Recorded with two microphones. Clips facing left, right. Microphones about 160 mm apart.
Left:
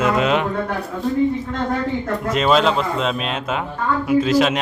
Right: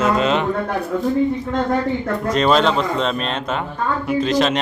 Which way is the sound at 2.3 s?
5° left (ahead or behind).